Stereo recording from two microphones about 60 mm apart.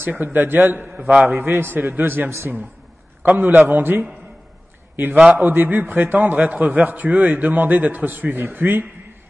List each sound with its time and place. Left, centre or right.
0.1 s a man's voice: right
5.3 s a man's voice: right